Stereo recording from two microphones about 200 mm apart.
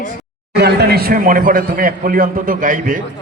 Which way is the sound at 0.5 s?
55° right (ahead or behind).